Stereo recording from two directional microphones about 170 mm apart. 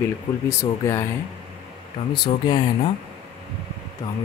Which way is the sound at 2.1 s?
30° left (ahead or behind).